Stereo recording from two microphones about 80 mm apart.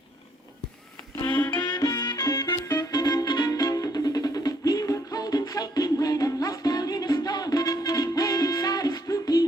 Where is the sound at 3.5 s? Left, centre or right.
Left.